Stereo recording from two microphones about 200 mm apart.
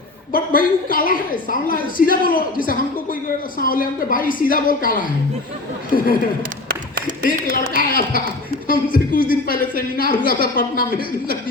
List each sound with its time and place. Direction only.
0.3 s speech: 45° left (ahead or behind)
7.5 s speech: 45° left (ahead or behind)